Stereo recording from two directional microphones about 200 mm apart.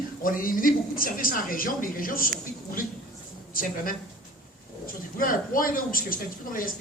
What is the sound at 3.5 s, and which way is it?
Speech, 45° left (ahead or behind).